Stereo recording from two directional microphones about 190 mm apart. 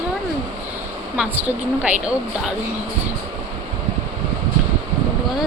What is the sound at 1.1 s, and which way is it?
Speech, 10° right (ahead or behind).